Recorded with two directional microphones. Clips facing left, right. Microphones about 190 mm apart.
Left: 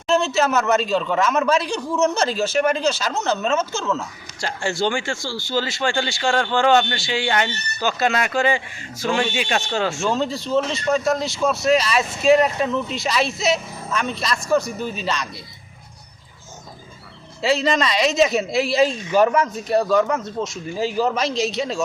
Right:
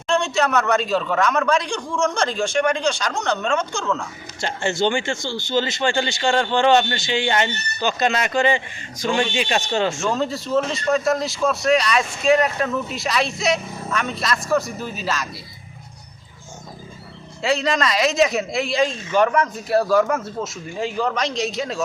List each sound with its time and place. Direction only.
0.1 s a man's voice: 5° left (ahead or behind)
5.1 s speech: 20° right (ahead or behind)
5.5 s a man's voice: centre (ahead or behind)
17.4 s a man's voice: centre (ahead or behind)
19.4 s a man's voice: 5° right (ahead or behind)